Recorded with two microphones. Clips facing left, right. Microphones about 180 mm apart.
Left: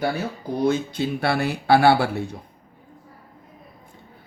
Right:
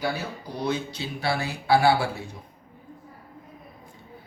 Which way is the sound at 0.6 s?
50° left (ahead or behind).